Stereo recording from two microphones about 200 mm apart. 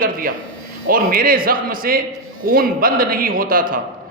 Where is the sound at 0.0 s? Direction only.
45° right (ahead or behind).